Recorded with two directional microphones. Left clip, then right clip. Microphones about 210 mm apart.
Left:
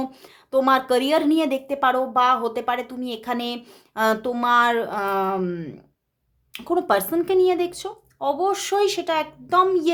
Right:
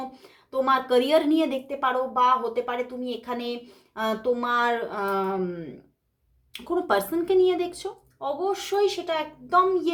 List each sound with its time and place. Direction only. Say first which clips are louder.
0.2 s a woman's voice: left 6 dB; 40° left (ahead or behind)